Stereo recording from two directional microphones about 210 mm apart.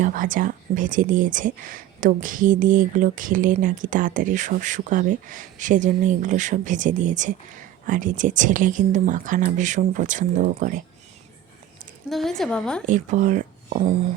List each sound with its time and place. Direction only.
0.0 s speech: 40° right (ahead or behind)
12.0 s a woman's voice: centre (ahead or behind)
12.8 s speech: 35° right (ahead or behind)